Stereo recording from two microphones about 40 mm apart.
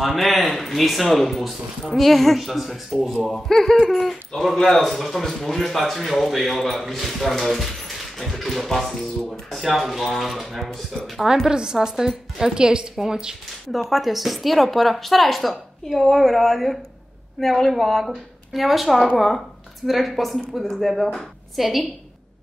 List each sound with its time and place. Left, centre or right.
0.0 s a woman's voice: centre
3.3 s a man's voice: centre
11.4 s a woman's voice: centre
13.7 s a woman's voice: centre